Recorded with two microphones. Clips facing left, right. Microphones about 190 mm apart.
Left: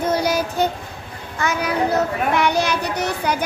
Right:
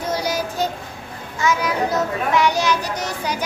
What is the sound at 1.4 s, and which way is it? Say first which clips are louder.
A child's voice: even; 60° left (ahead or behind).